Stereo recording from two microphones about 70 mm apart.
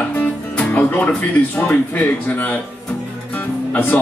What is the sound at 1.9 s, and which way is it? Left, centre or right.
Speech, left.